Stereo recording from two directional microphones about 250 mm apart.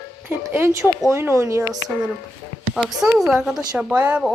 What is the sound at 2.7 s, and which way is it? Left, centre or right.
Speech, centre.